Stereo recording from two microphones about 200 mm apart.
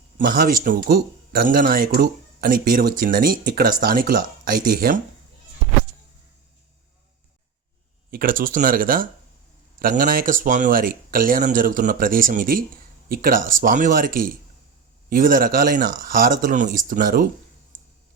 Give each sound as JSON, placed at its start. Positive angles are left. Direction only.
{"t": 0.2, "sound": "speech", "side_deg": -45}
{"t": 8.1, "sound": "speech", "side_deg": -45}